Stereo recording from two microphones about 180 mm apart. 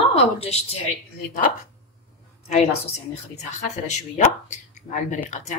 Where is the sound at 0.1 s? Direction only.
35° left (ahead or behind).